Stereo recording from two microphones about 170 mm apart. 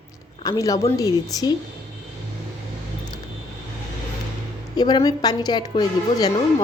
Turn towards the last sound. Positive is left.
turn(degrees=20)  # may be behind; listen again after turning